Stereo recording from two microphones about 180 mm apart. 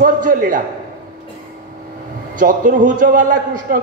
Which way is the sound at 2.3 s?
45° right (ahead or behind).